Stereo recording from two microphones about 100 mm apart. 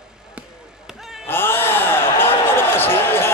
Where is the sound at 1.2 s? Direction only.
20° left (ahead or behind).